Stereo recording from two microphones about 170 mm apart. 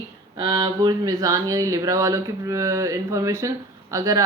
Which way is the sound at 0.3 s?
25° right (ahead or behind).